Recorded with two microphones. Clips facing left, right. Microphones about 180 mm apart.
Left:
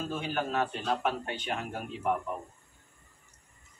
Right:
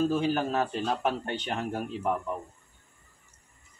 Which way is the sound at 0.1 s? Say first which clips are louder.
Right 5 dB; 40° right (ahead or behind).